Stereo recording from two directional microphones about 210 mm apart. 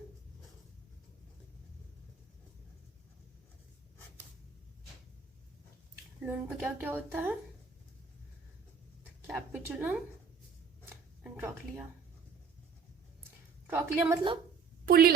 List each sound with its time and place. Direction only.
6.2 s a woman's voice: 10° right (ahead or behind)
9.2 s speech: 5° right (ahead or behind)
11.2 s a sound: 10° right (ahead or behind)
13.7 s a woman's voice: 10° right (ahead or behind)
14.8 s speech: 50° right (ahead or behind)